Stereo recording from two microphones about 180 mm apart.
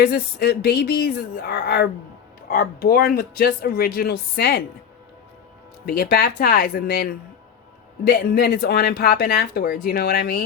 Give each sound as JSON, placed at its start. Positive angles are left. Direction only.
{"t": 0.0, "sound": "speech", "side_deg": 60}
{"t": 5.8, "sound": "speech", "side_deg": 60}